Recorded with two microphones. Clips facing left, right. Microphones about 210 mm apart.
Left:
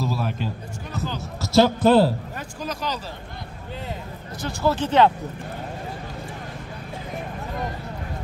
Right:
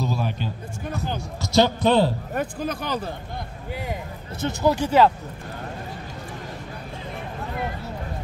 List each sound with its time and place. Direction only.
0.0 s a sound: centre (ahead or behind)
1.0 s basketball bounce: 5° left (ahead or behind)
1.4 s a man's voice: 5° left (ahead or behind)
2.3 s speech: 55° right (ahead or behind)
4.4 s speech: 20° right (ahead or behind)